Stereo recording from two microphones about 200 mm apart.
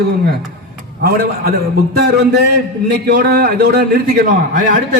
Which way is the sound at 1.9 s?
55° right (ahead or behind).